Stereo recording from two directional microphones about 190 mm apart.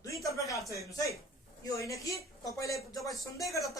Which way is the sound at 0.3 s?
15° left (ahead or behind).